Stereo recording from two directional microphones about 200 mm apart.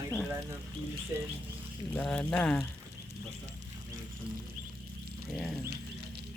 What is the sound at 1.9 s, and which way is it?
Speech, 5° left (ahead or behind).